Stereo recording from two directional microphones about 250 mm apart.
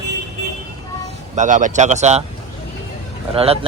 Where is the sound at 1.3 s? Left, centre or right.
Right.